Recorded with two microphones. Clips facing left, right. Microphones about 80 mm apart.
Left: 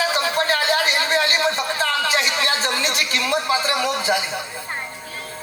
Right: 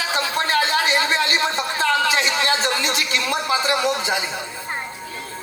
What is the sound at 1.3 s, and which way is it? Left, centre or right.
Speech, right.